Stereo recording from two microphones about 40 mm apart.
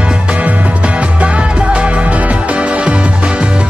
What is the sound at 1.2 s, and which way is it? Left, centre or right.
Music, right.